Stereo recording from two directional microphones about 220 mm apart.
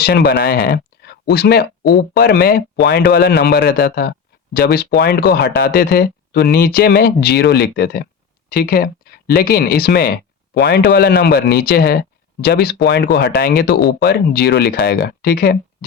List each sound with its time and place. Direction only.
0.0 s speech: 50° left (ahead or behind)